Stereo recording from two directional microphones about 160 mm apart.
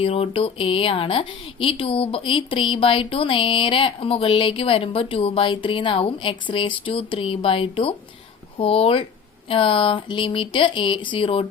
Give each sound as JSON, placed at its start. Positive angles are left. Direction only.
{"t": 0.0, "sound": "a woman's voice", "side_deg": 35}